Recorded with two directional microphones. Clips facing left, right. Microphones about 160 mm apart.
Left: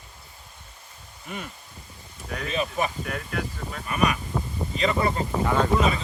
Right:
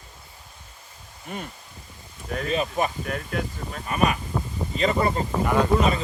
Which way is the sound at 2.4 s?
45° right (ahead or behind).